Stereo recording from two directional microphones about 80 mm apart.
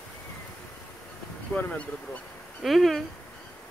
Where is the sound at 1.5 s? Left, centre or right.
Centre.